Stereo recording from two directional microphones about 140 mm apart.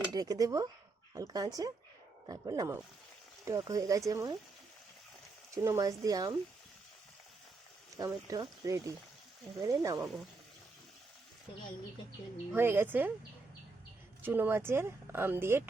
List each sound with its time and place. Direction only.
0.1 s speech: 25° right (ahead or behind)
5.6 s speech: 20° right (ahead or behind)
7.9 s speech: 25° right (ahead or behind)
12.5 s speech: 15° right (ahead or behind)
14.2 s speech: 15° right (ahead or behind)